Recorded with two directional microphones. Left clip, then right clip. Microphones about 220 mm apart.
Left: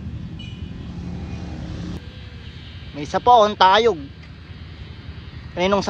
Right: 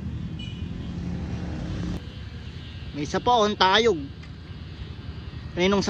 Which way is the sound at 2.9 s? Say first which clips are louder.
Left 8 dB; 10° left (ahead or behind).